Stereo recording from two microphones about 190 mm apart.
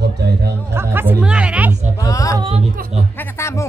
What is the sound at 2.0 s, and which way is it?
Speech, 15° left (ahead or behind).